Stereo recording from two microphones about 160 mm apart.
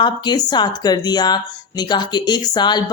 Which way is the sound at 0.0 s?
25° left (ahead or behind).